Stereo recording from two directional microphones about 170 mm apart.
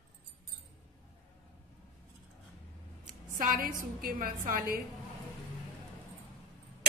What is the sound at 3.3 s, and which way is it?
A woman's voice, 55° right (ahead or behind).